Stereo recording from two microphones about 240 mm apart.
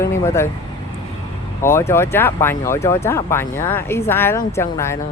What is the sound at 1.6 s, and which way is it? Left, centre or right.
Speech, centre.